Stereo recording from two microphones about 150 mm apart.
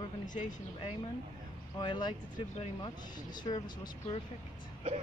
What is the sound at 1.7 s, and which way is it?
Speech, 30° left (ahead or behind).